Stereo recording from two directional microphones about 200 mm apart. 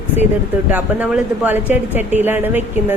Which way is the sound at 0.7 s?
10° right (ahead or behind).